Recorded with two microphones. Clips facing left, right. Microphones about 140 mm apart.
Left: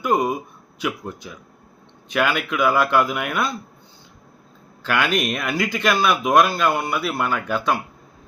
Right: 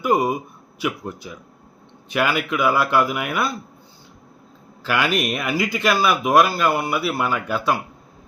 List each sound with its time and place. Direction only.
0.0 s speech: 5° right (ahead or behind)
4.8 s speech: 5° right (ahead or behind)